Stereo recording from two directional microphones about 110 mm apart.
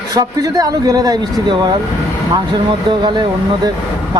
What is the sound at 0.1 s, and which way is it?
Speech, 35° right (ahead or behind).